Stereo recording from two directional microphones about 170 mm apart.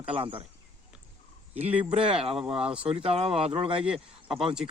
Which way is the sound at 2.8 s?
35° right (ahead or behind).